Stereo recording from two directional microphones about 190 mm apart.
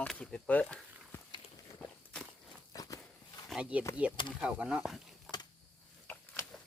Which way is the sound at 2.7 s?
20° left (ahead or behind).